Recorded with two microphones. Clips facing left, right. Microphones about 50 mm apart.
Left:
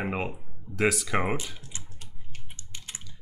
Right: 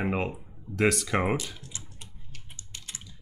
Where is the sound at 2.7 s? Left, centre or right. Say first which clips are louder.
Left 1 dB; left.